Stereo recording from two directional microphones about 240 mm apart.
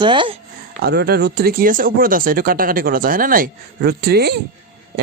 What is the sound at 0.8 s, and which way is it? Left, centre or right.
Speech, right.